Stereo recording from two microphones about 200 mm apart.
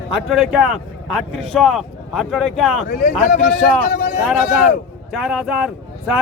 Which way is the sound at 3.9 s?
55° left (ahead or behind).